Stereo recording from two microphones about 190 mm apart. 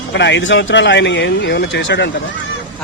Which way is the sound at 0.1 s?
70° left (ahead or behind).